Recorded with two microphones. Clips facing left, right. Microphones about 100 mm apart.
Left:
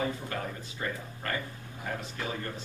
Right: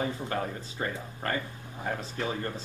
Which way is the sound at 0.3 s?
30° right (ahead or behind).